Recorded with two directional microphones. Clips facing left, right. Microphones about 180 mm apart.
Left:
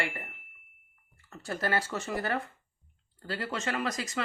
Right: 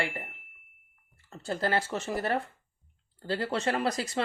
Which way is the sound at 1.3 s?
30° right (ahead or behind).